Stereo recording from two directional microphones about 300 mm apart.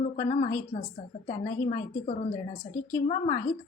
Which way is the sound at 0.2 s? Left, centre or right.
Centre.